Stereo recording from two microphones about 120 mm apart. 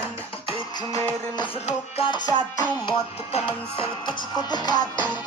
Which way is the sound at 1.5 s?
60° left (ahead or behind).